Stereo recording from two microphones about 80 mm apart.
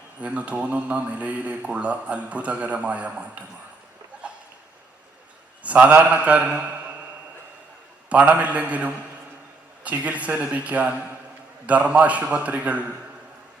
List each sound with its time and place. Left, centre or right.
0.2 s speech: centre
5.6 s speech: centre
8.1 s speech: centre